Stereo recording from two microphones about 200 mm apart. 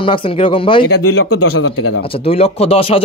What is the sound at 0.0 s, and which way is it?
Speech, 25° left (ahead or behind).